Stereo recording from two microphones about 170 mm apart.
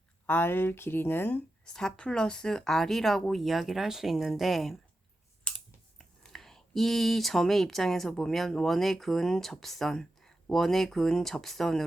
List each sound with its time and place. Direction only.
0.3 s speech: 10° left (ahead or behind)
6.0 s speech: centre (ahead or behind)